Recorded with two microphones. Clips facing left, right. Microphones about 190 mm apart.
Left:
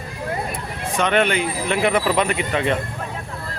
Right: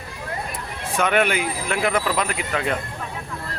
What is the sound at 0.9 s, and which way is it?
Speech, 5° right (ahead or behind).